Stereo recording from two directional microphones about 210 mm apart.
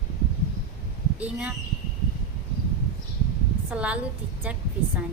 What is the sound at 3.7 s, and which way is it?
Speech, 5° right (ahead or behind).